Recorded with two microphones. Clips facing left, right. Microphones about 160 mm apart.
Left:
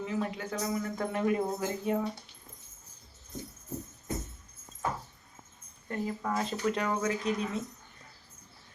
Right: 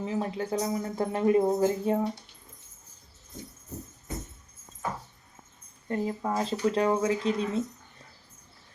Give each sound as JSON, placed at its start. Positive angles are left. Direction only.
{"t": 0.0, "sound": "speech", "side_deg": -30}
{"t": 5.9, "sound": "speech", "side_deg": -25}